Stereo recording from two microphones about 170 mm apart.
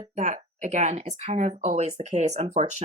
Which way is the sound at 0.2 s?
45° right (ahead or behind).